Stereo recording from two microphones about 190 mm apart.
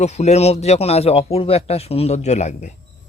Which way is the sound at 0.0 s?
35° left (ahead or behind).